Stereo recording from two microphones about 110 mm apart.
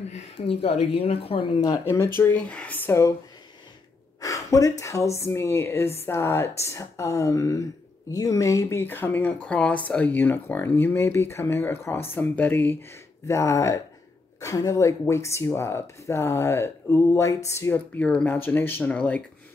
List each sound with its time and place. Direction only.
0.1 s speech: 65° left (ahead or behind)
1.9 s speech: 20° left (ahead or behind)
4.2 s speech: 30° left (ahead or behind)
13.3 s speech: 25° left (ahead or behind)